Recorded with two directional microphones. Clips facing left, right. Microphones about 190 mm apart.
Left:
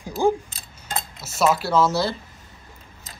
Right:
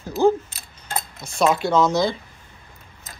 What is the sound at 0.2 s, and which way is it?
Speech, 10° left (ahead or behind).